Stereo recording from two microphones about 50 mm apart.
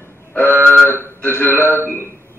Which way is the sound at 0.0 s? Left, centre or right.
Left.